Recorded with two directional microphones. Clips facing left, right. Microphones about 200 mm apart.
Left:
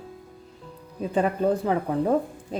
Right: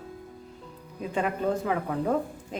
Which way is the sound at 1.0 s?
35° left (ahead or behind).